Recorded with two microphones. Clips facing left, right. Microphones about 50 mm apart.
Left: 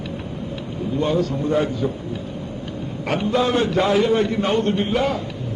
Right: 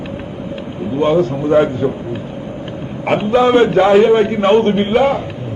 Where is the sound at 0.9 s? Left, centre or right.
Right.